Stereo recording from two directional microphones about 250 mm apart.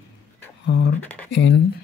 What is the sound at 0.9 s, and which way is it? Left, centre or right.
Speech, centre.